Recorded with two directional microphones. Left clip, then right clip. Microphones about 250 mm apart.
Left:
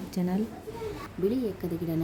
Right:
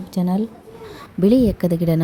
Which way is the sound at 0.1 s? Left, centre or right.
Centre.